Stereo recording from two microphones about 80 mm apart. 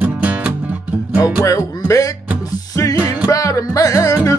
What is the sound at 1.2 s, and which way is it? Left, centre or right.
Music, left.